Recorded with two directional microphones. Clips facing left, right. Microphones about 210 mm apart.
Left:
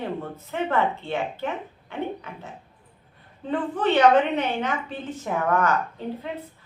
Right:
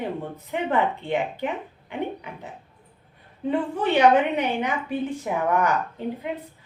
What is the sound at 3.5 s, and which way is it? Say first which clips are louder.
A woman's voice: even; 10° right (ahead or behind).